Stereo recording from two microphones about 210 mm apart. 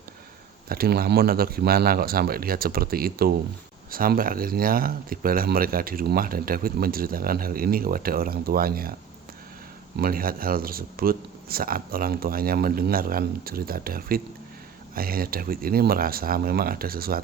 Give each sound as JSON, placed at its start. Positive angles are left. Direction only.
{"t": 0.7, "sound": "speech", "side_deg": -45}
{"t": 10.0, "sound": "speech", "side_deg": -45}